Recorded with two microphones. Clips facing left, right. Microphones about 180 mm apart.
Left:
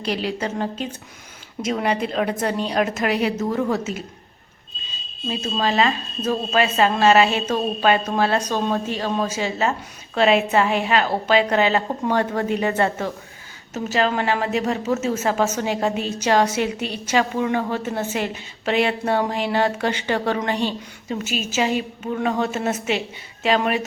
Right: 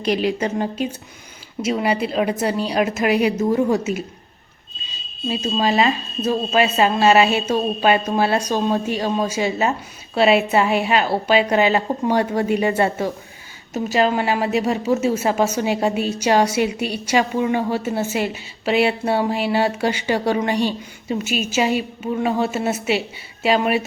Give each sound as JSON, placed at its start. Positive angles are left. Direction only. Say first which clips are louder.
{"t": 0.0, "sound": "a woman's voice", "louder": "right 5 dB", "side_deg": -15}
{"t": 5.3, "sound": "a woman's voice", "louder": "right 3 dB", "side_deg": -10}